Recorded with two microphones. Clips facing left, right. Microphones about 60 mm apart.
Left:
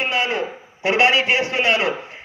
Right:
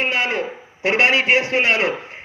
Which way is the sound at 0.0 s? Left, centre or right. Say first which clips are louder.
Even; right.